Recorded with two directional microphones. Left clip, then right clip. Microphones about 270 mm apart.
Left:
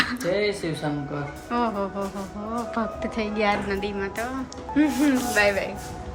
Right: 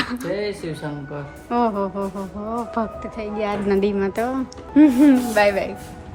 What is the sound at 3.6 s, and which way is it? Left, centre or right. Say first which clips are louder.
Speech: right 8 dB; centre.